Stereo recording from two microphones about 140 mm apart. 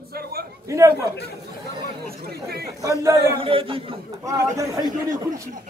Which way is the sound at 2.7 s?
25° right (ahead or behind).